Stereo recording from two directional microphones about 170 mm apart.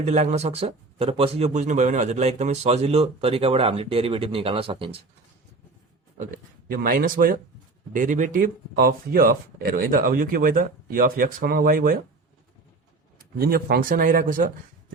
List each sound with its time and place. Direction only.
0.0 s speech: 45° right (ahead or behind)
6.1 s speech: 55° right (ahead or behind)
13.4 s speech: 65° right (ahead or behind)